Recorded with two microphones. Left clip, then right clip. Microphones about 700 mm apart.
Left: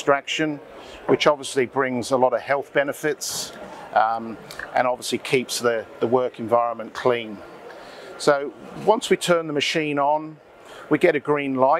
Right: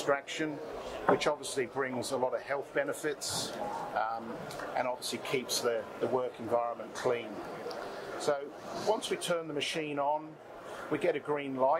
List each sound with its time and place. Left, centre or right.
0.0 s speech: left
8.3 s a man's voice: left